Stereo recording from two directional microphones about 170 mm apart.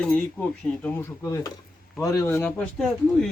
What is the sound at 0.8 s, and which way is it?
Speech, 15° left (ahead or behind).